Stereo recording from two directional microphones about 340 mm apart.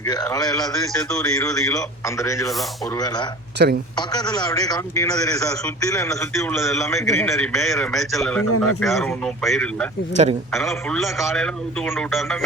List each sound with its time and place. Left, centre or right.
0.0 s a man's voice: centre
3.6 s speech: right
3.9 s a man's voice: centre
10.2 s speech: centre
10.5 s a man's voice: centre